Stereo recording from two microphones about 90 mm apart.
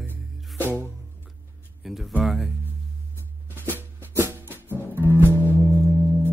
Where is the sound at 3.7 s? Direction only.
25° right (ahead or behind).